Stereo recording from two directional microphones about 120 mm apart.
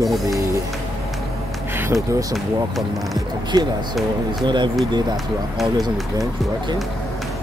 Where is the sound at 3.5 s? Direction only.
35° right (ahead or behind).